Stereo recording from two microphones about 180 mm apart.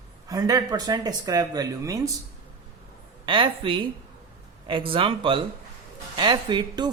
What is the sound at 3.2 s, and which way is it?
Speech, 30° right (ahead or behind).